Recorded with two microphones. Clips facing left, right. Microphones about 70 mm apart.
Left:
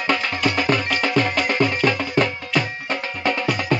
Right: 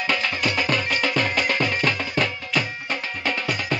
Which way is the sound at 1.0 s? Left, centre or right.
Left.